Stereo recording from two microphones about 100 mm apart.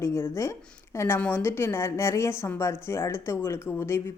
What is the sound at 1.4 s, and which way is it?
A woman's voice, 25° left (ahead or behind).